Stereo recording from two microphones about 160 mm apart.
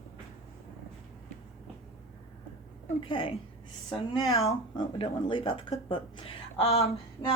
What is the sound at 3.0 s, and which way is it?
Speech, 30° left (ahead or behind).